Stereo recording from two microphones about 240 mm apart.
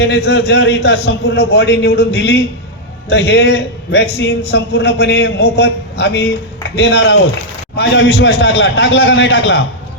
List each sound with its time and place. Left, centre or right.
0.0 s a man's voice: left